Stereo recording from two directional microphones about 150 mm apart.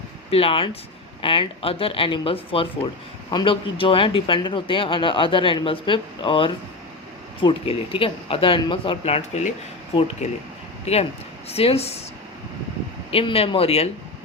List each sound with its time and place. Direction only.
0.3 s a man's voice: 40° left (ahead or behind)
13.1 s a man's voice: 40° left (ahead or behind)